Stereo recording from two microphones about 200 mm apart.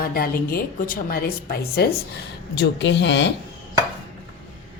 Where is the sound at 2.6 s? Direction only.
60° left (ahead or behind).